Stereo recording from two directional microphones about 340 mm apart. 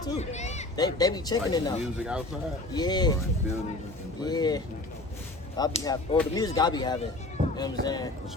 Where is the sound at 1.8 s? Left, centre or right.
Centre.